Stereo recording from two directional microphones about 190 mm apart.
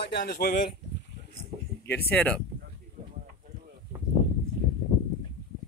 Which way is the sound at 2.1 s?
5° left (ahead or behind).